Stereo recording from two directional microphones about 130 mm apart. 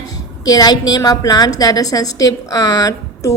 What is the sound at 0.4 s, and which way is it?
A woman's voice, 30° left (ahead or behind).